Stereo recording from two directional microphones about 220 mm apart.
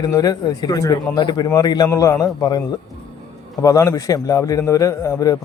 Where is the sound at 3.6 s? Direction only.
15° left (ahead or behind).